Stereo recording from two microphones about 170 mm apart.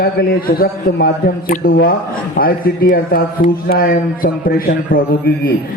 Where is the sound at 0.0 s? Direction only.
65° left (ahead or behind).